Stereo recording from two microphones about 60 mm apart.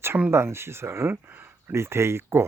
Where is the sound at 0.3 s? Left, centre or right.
Right.